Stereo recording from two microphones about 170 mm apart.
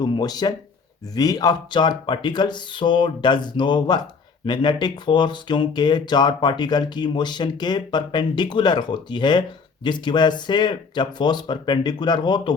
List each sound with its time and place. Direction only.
0.0 s speech: 25° left (ahead or behind)